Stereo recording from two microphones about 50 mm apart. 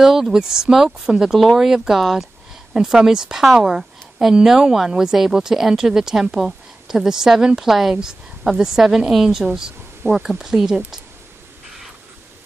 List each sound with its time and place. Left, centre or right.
0.0 s speech: centre